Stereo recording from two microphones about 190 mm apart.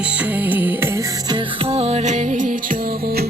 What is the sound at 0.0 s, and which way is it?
Music, 5° right (ahead or behind).